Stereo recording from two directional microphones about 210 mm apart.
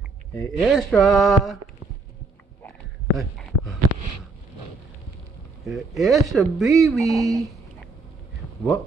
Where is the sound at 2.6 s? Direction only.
5° left (ahead or behind).